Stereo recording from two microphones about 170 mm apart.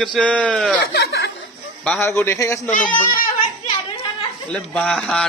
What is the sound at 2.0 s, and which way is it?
Speech, 15° left (ahead or behind).